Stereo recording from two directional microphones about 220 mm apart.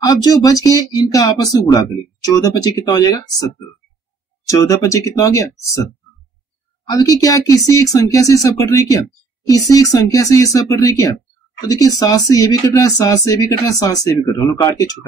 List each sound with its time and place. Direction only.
0.0 s speech: 15° left (ahead or behind)
4.5 s speech: 15° left (ahead or behind)
6.9 s speech: 15° left (ahead or behind)